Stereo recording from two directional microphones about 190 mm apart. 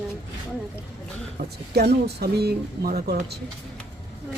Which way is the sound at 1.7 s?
55° right (ahead or behind).